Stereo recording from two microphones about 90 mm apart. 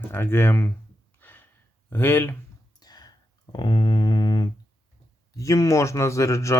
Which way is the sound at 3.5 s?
55° left (ahead or behind).